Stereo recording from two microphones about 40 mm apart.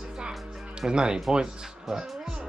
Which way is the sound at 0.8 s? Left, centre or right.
Centre.